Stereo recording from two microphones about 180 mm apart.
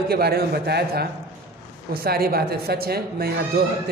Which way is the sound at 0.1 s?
60° right (ahead or behind).